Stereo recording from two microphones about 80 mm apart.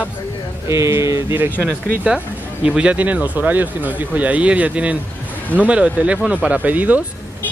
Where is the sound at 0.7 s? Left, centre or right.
Right.